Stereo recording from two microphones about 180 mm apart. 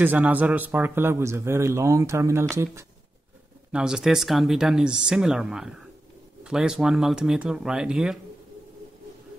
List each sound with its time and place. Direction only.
0.0 s a man's voice: 10° right (ahead or behind)
3.7 s speech: 5° right (ahead or behind)